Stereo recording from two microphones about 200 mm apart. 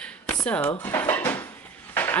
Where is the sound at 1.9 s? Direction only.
10° left (ahead or behind).